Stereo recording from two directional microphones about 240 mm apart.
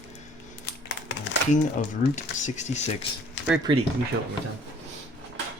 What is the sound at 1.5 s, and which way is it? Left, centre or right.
Speech, left.